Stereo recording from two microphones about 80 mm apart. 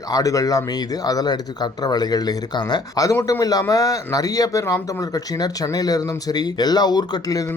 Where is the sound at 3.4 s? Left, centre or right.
Left.